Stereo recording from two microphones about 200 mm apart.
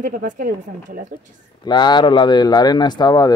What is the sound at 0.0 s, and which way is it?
Speech, 45° right (ahead or behind).